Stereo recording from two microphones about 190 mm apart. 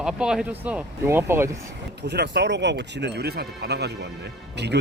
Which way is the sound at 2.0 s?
65° right (ahead or behind).